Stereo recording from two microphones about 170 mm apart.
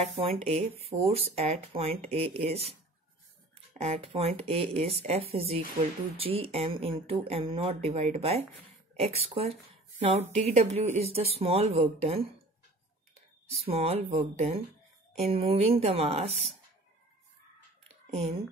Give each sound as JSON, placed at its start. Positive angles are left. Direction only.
{"t": 0.1, "sound": "speech", "side_deg": -35}
{"t": 3.7, "sound": "speech", "side_deg": -40}
{"t": 13.7, "sound": "speech", "side_deg": -35}